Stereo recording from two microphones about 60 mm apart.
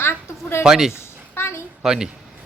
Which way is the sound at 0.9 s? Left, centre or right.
Left.